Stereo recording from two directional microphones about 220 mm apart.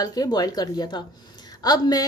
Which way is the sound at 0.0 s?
15° left (ahead or behind).